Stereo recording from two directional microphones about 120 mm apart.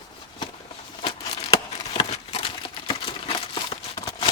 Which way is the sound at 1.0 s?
50° left (ahead or behind).